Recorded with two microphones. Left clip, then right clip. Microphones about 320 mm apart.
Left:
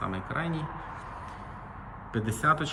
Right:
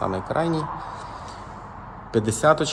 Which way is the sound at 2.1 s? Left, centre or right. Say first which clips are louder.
Right 8 dB; right.